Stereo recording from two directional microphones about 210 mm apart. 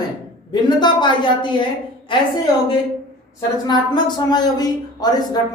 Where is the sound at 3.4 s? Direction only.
20° left (ahead or behind).